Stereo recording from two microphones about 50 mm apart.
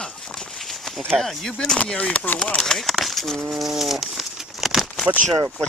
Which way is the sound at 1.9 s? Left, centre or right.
Left.